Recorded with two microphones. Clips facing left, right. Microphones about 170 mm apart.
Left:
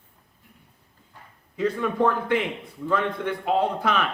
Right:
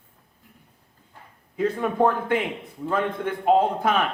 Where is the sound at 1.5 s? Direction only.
50° right (ahead or behind).